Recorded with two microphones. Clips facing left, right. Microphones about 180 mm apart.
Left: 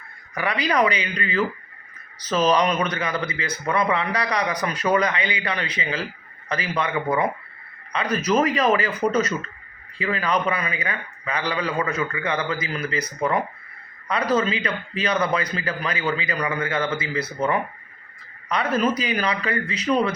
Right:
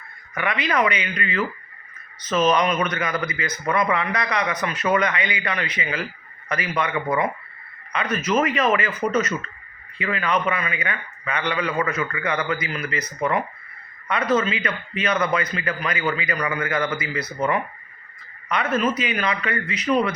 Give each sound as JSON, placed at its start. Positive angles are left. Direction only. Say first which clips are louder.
{"t": 0.3, "sound": "a man's voice", "louder": "left 1 dB", "side_deg": 35}
{"t": 7.9, "sound": "a man's voice", "louder": "left 1 dB", "side_deg": 35}
{"t": 14.1, "sound": "a man's voice", "louder": "even", "side_deg": 35}